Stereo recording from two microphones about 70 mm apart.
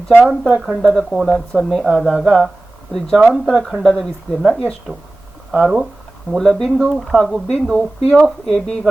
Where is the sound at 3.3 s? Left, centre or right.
Centre.